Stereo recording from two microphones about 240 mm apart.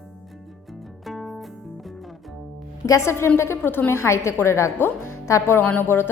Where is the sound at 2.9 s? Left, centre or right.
Centre.